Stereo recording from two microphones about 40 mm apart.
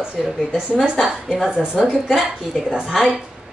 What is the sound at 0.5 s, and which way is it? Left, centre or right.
Speech, centre.